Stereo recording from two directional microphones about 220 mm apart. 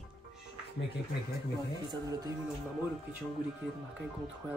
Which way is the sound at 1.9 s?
15° right (ahead or behind).